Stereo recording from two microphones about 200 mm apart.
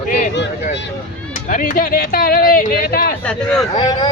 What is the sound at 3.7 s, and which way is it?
Speech, 20° left (ahead or behind).